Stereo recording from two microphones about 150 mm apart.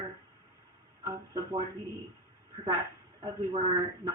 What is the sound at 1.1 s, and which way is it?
Speech, 25° right (ahead or behind).